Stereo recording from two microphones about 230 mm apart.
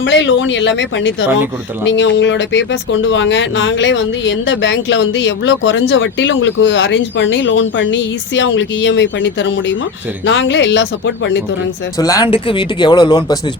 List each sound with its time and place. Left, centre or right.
0.0 s speech: left
11.9 s speech: centre